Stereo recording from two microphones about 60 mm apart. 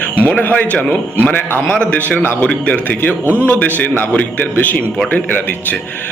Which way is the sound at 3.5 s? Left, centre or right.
Left.